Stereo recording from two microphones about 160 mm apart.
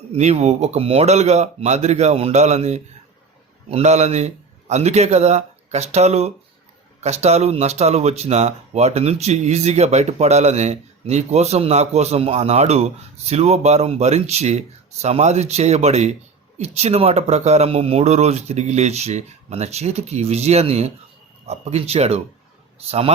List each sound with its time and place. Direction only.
0.1 s speech: 45° right (ahead or behind)